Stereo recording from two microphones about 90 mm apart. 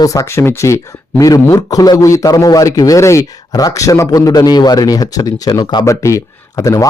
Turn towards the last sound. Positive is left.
turn(degrees=40)  # may be behind; listen again after turning